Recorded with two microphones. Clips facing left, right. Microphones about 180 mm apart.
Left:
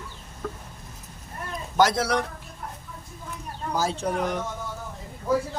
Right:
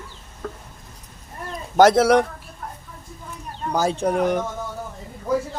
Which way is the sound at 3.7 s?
60° right (ahead or behind).